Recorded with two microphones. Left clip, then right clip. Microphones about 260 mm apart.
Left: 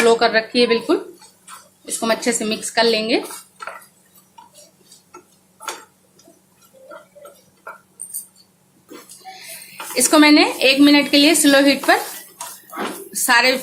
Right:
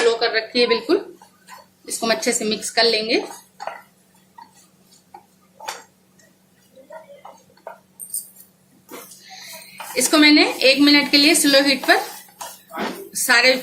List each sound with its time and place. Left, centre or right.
0.1 s a woman's voice: left
9.9 s a woman's voice: centre
13.1 s a woman's voice: centre